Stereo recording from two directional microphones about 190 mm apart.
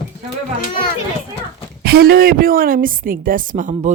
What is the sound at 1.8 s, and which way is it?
A woman's voice, 55° right (ahead or behind).